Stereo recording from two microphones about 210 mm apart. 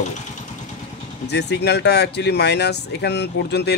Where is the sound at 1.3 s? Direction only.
55° left (ahead or behind).